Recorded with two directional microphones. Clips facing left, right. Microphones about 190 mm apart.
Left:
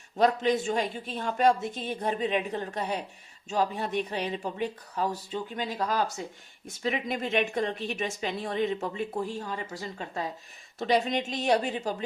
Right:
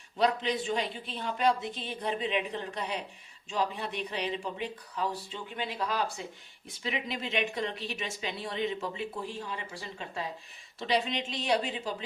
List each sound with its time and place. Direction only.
0.2 s a woman's voice: 45° left (ahead or behind)